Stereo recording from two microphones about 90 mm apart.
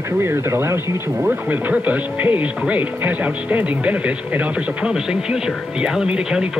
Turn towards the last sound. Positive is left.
turn(degrees=-10)  # may be behind; listen again after turning